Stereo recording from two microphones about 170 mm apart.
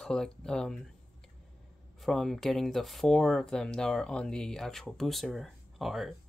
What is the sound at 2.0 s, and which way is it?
Speech, centre (ahead or behind).